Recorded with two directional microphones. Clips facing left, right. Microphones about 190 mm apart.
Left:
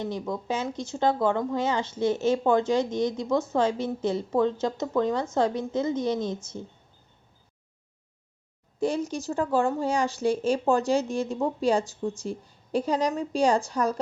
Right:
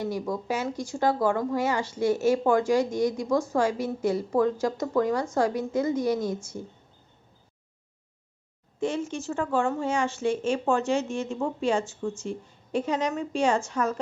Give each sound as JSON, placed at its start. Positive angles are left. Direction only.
{"t": 0.4, "sound": "speech", "side_deg": 20}
{"t": 8.8, "sound": "speech", "side_deg": 35}